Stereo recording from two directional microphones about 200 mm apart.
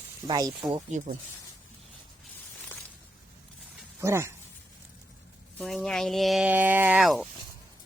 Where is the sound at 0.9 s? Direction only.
40° right (ahead or behind).